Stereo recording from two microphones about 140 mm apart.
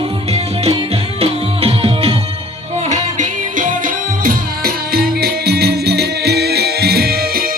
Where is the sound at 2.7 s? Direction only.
55° right (ahead or behind); by 5.4 s 90° right.